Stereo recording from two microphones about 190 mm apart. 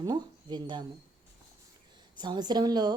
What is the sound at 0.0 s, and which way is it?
Speech, 20° right (ahead or behind).